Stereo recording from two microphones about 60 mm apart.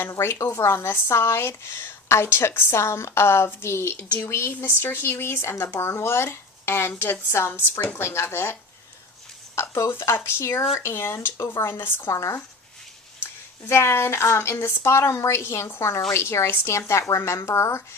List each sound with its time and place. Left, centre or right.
0.2 s speech: left
4.8 s speech: left
9.6 s speech: left
12.1 s speech: left
13.7 s speech: left